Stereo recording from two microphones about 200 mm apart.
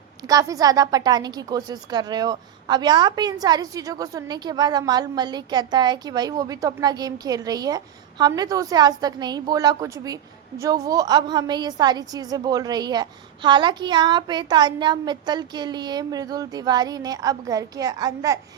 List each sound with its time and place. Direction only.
0.3 s a woman's voice: 15° right (ahead or behind)